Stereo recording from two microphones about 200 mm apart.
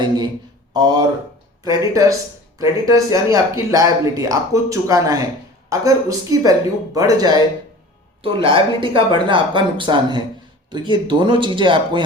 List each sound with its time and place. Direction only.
0.7 s a woman's voice: 20° right (ahead or behind)